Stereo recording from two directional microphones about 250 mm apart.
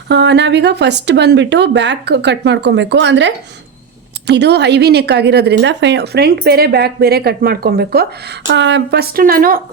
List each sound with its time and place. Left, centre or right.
0.1 s a woman's voice: right